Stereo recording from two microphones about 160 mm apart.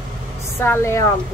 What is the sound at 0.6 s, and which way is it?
Speech, 15° left (ahead or behind).